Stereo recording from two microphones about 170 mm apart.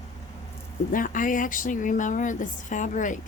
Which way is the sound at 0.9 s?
50° left (ahead or behind).